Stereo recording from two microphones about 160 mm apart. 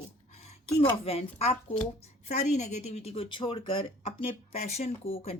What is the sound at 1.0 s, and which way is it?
Speech, 40° left (ahead or behind).